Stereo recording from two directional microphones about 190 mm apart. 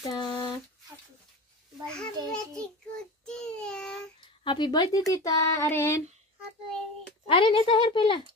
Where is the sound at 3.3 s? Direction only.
5° left (ahead or behind).